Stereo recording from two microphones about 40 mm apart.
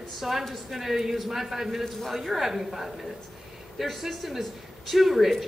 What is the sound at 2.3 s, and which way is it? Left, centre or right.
A man's voice, centre.